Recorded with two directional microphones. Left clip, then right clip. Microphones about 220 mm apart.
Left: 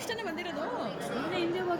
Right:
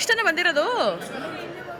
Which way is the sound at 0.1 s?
Centre (ahead or behind).